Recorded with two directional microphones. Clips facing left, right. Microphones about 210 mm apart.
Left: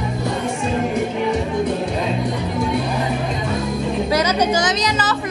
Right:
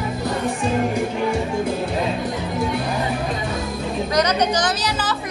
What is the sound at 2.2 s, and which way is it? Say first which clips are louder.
Music: left 2 dB; centre (ahead or behind).